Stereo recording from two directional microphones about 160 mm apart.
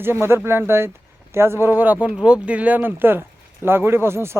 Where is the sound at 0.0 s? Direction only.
15° right (ahead or behind).